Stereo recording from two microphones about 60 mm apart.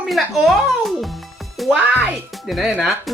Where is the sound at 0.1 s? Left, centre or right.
Centre.